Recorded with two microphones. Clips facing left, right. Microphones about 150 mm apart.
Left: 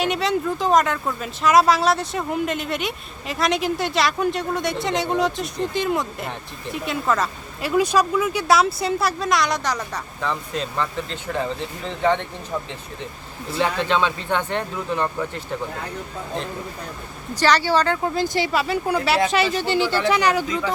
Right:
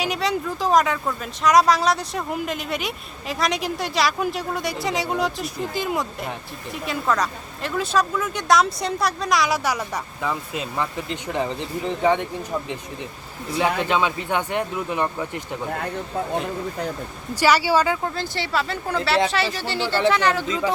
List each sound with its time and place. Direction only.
0.0 s speech: centre (ahead or behind)
7.8 s speech: 15° left (ahead or behind); by 12.3 s 10° right (ahead or behind)
13.7 s speech: 10° right (ahead or behind)
17.3 s speech: 10° right (ahead or behind)
18.0 s speech: 15° left (ahead or behind)